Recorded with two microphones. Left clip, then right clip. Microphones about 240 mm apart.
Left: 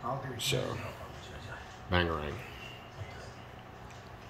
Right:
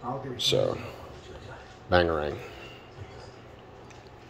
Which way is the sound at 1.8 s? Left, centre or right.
Centre.